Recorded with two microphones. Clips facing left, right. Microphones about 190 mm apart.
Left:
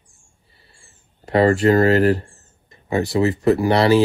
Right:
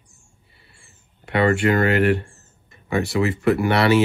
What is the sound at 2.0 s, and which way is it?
Speech, 30° left (ahead or behind).